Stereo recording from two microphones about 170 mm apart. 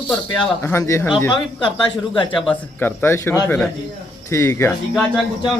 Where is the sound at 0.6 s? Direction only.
15° left (ahead or behind).